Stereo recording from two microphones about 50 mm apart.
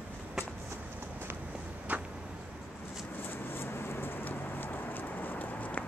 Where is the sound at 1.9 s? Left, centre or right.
Right.